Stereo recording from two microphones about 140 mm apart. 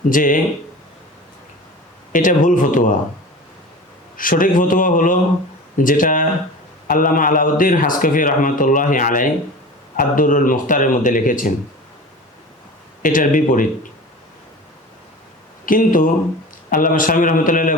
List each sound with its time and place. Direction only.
0.1 s a man's voice: 75° left (ahead or behind)
2.1 s a man's voice: 70° left (ahead or behind)
4.2 s a man's voice: 75° left (ahead or behind)
13.0 s a man's voice: 70° left (ahead or behind)
15.6 s a man's voice: 80° left